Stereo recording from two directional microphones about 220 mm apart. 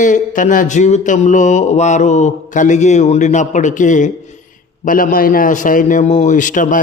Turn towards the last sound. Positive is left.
turn(degrees=35)  # may be behind; listen again after turning